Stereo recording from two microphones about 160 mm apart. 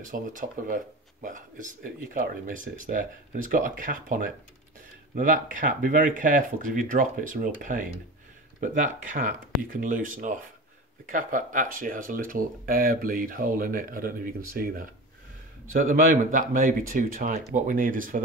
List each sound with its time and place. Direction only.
0.0 s speech: 55° right (ahead or behind)